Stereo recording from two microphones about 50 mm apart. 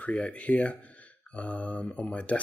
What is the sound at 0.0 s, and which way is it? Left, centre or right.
Speech, left.